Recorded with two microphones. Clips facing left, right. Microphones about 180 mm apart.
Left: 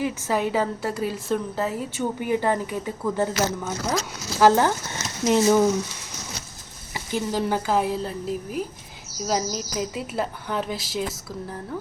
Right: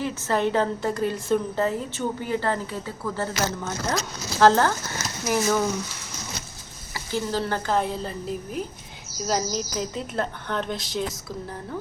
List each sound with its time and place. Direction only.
0.0 s a woman's voice: 10° left (ahead or behind)
3.7 s a woman's voice: 5° left (ahead or behind)
5.2 s speech: 25° left (ahead or behind)
6.9 s a woman's voice: 15° left (ahead or behind)